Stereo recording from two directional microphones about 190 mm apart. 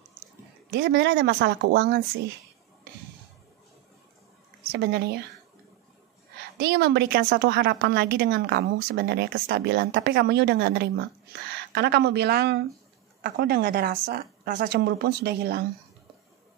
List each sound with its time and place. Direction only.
0.7 s a woman's voice: 60° right (ahead or behind)
4.7 s a woman's voice: 60° right (ahead or behind)
6.6 s a woman's voice: 65° right (ahead or behind)